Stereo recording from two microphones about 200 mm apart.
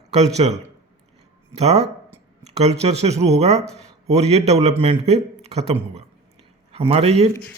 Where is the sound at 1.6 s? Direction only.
35° right (ahead or behind).